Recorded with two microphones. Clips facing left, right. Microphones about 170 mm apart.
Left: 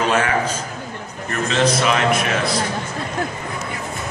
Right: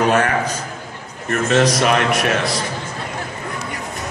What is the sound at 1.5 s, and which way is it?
Speech, 50° right (ahead or behind).